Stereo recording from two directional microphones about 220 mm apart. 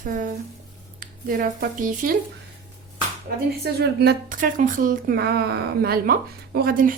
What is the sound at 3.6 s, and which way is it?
A woman's voice, 45° right (ahead or behind).